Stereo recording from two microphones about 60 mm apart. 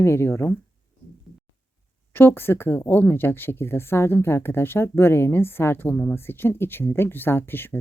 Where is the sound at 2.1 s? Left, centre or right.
Left.